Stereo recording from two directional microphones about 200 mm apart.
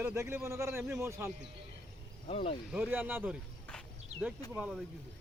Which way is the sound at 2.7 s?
10° right (ahead or behind).